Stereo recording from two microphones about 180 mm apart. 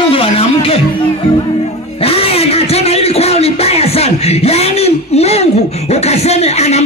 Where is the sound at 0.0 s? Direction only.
30° left (ahead or behind).